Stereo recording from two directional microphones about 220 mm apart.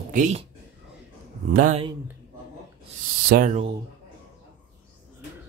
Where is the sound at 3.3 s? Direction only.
35° right (ahead or behind).